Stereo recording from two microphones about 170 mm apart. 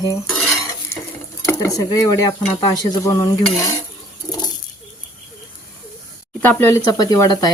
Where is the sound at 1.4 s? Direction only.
20° left (ahead or behind).